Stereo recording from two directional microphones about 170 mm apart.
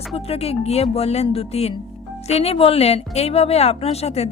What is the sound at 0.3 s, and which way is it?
A woman's voice, 35° left (ahead or behind).